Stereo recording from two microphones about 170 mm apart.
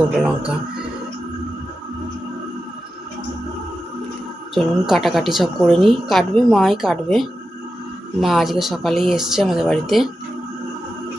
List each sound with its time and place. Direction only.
0.2 s speech: 10° right (ahead or behind)
4.5 s speech: centre (ahead or behind)